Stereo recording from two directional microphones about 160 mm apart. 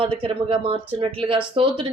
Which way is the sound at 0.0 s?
35° right (ahead or behind).